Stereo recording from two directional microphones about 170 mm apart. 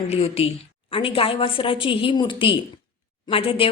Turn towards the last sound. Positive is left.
turn(degrees=35)  # may be behind; listen again after turning